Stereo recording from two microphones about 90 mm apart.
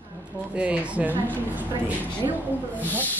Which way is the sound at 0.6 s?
15° right (ahead or behind).